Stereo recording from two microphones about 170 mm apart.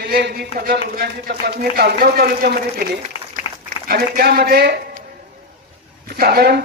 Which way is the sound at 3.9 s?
65° right (ahead or behind).